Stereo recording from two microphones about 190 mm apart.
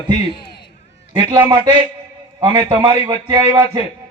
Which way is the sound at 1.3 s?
20° right (ahead or behind).